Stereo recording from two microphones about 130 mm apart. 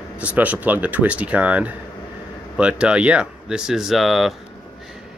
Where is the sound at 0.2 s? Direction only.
10° right (ahead or behind).